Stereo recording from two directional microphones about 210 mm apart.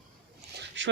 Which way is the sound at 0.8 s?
60° right (ahead or behind).